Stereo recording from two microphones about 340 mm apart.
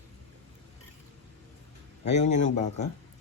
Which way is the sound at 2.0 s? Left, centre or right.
Centre.